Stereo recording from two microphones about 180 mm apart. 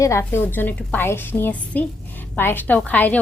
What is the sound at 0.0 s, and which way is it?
A woman's voice, 15° left (ahead or behind).